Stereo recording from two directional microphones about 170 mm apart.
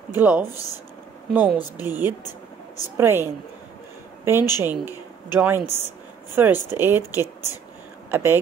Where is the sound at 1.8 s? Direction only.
10° right (ahead or behind).